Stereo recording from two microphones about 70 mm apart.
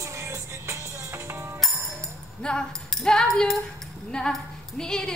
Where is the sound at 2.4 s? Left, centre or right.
Centre.